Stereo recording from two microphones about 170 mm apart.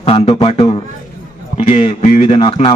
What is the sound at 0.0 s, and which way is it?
A man's voice, 35° left (ahead or behind).